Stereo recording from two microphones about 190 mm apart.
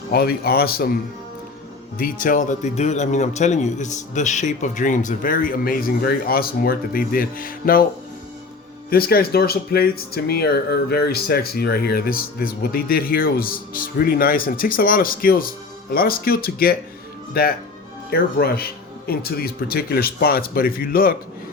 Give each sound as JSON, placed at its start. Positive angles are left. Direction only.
{"t": 0.1, "sound": "speech", "side_deg": 55}
{"t": 2.2, "sound": "speech", "side_deg": 40}
{"t": 8.9, "sound": "speech", "side_deg": 50}